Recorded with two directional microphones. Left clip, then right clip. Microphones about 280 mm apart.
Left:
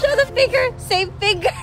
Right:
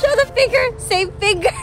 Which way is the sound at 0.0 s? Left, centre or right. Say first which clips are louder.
Right 1 dB; centre.